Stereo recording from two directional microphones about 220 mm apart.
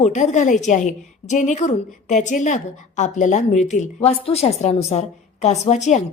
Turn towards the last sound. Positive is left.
turn(degrees=30)  # may be behind; listen again after turning